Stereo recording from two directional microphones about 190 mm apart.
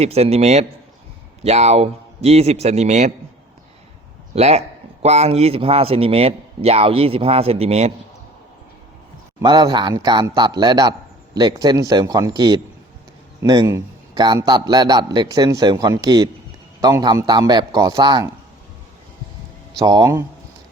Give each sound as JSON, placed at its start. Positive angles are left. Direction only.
{"t": 0.0, "sound": "speech", "side_deg": -35}
{"t": 4.4, "sound": "speech", "side_deg": -35}
{"t": 9.4, "sound": "a man's voice", "side_deg": -20}
{"t": 19.8, "sound": "a man's voice", "side_deg": -20}